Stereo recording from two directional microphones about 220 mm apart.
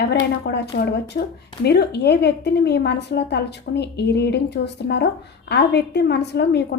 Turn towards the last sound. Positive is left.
turn(degrees=50)  # may be behind; listen again after turning